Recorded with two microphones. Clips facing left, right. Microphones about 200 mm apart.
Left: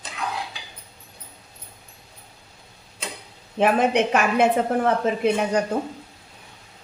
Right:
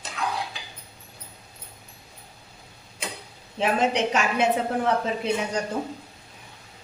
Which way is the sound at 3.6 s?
55° left (ahead or behind).